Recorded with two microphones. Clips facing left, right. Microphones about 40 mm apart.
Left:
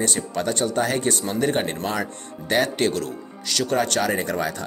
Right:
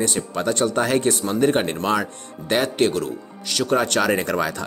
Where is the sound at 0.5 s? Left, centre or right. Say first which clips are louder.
Right 4 dB; right.